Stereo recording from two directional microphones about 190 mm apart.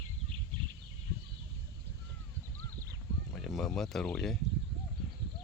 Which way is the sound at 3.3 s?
Centre (ahead or behind).